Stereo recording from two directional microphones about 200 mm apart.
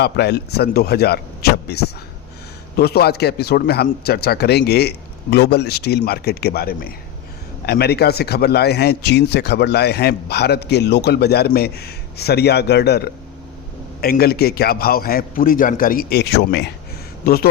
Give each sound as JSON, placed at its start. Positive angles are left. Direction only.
{"t": 0.0, "sound": "a man's voice", "side_deg": 55}